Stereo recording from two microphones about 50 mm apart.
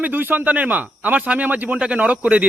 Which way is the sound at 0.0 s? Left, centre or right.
Right.